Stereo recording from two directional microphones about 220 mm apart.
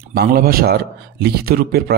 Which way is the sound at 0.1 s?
45° right (ahead or behind).